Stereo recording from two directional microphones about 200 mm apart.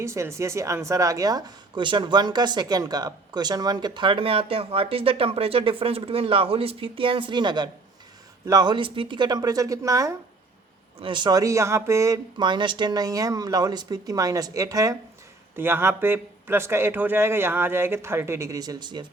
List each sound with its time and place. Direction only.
0.0 s a woman's voice: 15° right (ahead or behind)